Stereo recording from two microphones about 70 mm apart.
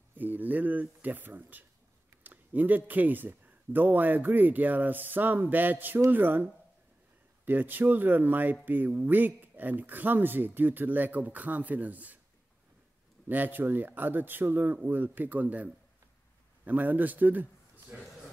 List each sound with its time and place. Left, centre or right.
0.1 s speech: right
13.3 s a man's voice: right